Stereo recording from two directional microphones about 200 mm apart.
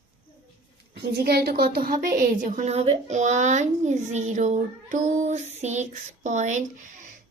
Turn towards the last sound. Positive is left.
turn(degrees=-35)  # may be behind; listen again after turning